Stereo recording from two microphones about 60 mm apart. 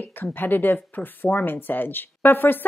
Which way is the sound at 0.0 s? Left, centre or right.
Left.